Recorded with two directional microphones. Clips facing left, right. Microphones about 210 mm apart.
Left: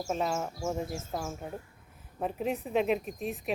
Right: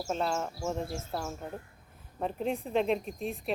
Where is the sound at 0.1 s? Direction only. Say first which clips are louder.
Even; 5° left (ahead or behind).